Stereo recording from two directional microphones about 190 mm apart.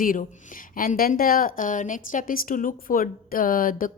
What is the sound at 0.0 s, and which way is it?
Speech, 45° left (ahead or behind).